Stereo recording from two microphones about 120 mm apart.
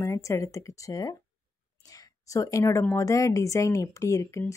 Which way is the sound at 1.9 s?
30° left (ahead or behind).